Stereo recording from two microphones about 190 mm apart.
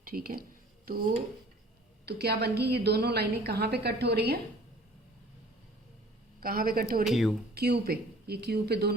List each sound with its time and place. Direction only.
0.0 s a woman's voice: 50° right (ahead or behind)
2.0 s a woman's voice: 55° right (ahead or behind)
6.4 s a woman's voice: 50° right (ahead or behind)
7.0 s speech: centre (ahead or behind)
7.5 s a woman's voice: 55° right (ahead or behind)